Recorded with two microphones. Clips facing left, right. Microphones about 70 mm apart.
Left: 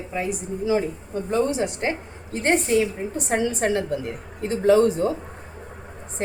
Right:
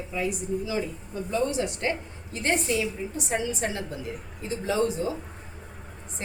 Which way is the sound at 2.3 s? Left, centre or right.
Left.